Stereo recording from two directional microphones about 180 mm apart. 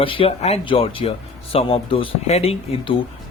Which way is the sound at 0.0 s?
30° left (ahead or behind).